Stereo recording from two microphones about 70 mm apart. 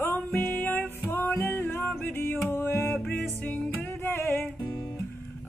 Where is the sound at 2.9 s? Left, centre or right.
Centre.